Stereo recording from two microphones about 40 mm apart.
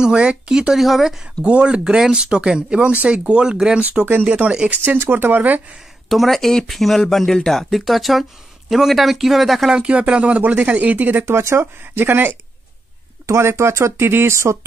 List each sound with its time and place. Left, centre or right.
0.0 s speech: right
0.7 s speech: centre
1.4 s speech: right
4.0 s speech: right
4.4 s speech: right
4.8 s speech: right
5.2 s speech: right
6.0 s speech: centre
9.8 s speech: right
11.2 s speech: right
11.8 s speech: right
13.9 s speech: right